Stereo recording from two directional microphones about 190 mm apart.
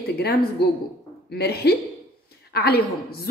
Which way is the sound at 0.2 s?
55° left (ahead or behind).